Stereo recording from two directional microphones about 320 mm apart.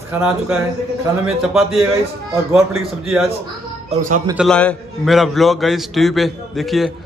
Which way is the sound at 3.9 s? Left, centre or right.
Right.